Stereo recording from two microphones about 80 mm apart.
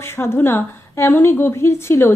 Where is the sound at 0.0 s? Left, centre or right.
Left.